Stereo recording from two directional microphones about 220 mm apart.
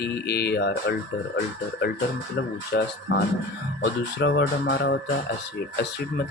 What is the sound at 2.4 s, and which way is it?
Speech, 50° left (ahead or behind).